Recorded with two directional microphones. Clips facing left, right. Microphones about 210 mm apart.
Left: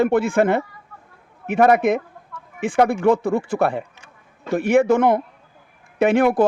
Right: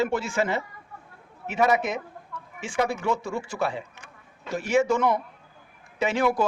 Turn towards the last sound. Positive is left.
turn(degrees=55)  # may be behind; listen again after turning